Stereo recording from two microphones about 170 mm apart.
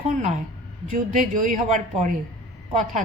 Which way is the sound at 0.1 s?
50° right (ahead or behind).